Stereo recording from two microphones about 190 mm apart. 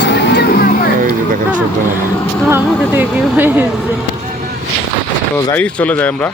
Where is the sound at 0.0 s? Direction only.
65° left (ahead or behind).